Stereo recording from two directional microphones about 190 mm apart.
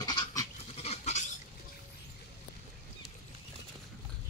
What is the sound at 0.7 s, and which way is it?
Goat, 35° left (ahead or behind).